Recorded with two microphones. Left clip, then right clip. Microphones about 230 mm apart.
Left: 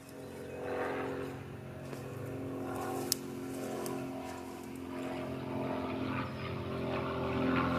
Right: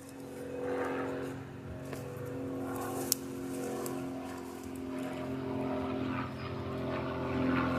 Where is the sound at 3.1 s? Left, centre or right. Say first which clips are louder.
Right 1 dB; centre.